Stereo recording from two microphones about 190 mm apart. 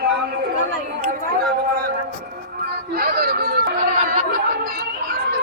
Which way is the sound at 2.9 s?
55° right (ahead or behind).